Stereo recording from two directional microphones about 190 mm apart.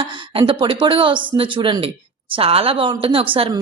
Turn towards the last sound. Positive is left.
turn(degrees=-30)  # may be behind; listen again after turning